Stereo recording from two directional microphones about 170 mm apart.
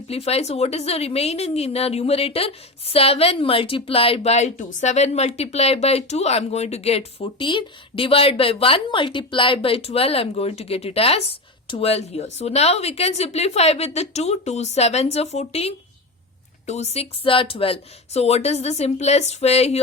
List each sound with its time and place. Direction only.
0.1 s speech: 35° left (ahead or behind)